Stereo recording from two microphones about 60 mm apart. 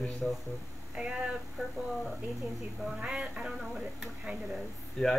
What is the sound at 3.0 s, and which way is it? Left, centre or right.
Speech, centre.